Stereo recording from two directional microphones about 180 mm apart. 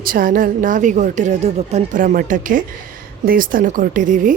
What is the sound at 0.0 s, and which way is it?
Speech, 50° right (ahead or behind).